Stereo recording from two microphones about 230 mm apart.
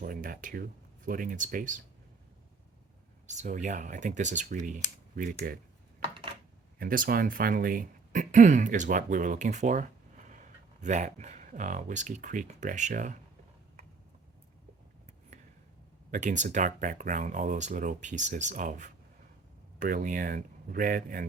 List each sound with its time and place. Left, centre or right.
0.0 s speech: right
3.2 s speech: right
6.7 s speech: right
15.3 s a sound: right
16.1 s speech: right